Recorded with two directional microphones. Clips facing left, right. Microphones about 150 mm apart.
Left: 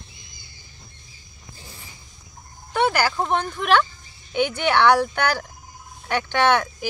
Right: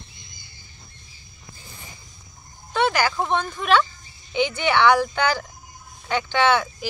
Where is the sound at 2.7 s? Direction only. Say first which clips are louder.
Even; 10° left (ahead or behind).